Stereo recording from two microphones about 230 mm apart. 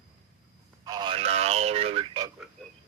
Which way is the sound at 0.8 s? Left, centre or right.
Centre.